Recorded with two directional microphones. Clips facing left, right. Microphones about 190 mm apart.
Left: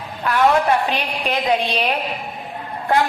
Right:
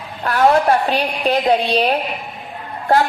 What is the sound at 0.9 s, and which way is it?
A woman's voice, 40° right (ahead or behind).